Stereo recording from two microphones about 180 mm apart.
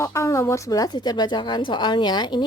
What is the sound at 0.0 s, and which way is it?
A woman's voice, 15° left (ahead or behind).